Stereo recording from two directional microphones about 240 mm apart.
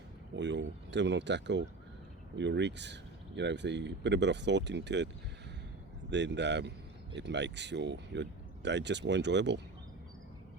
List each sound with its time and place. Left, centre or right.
0.3 s speech: right
6.1 s speech: right